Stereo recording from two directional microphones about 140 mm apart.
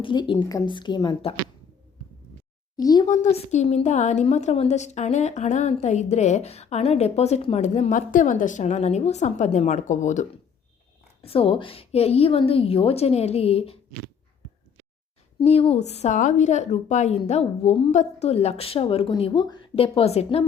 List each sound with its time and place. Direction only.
0.0 s speech: 35° left (ahead or behind)
2.7 s a child's voice: 30° left (ahead or behind)
3.3 s a woman's voice: 55° left (ahead or behind)
11.3 s a woman's voice: 40° left (ahead or behind)
15.4 s a woman's voice: 45° left (ahead or behind)